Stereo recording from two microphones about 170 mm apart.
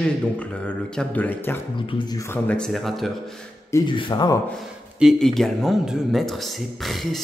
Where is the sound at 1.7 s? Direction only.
25° left (ahead or behind).